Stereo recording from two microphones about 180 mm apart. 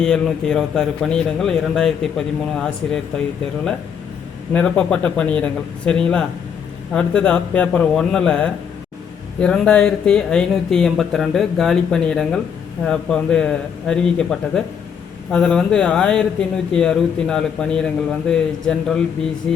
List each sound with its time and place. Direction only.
0.0 s a man's voice: 5° left (ahead or behind)
4.5 s a man's voice: 5° left (ahead or behind)
19.5 s mantra: 5° left (ahead or behind)